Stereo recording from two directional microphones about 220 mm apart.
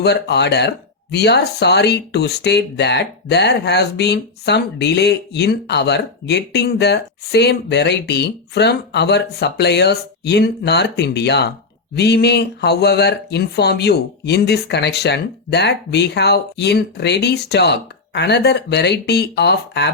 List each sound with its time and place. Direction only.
0.0 s speech: 50° left (ahead or behind)